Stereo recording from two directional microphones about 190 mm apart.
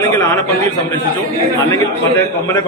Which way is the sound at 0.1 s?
15° left (ahead or behind).